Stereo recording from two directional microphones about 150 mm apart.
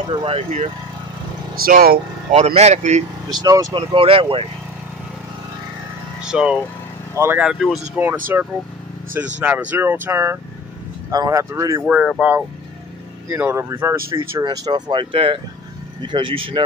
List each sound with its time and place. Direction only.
0.0 s speech: 35° right (ahead or behind)
1.5 s speech: 80° right
2.3 s speech: 45° right (ahead or behind)
3.3 s speech: 25° right (ahead or behind)
6.2 s speech: 5° right (ahead or behind)
7.4 s speech: centre (ahead or behind)
9.4 s speech: 10° right (ahead or behind)
11.9 s speech: 5° right (ahead or behind); by 16.6 s 35° right (ahead or behind)